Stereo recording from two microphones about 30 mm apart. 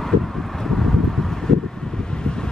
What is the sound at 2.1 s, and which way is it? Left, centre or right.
Vehicle, left.